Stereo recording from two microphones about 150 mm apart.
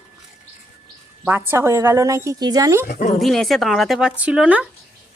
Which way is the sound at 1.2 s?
15° right (ahead or behind).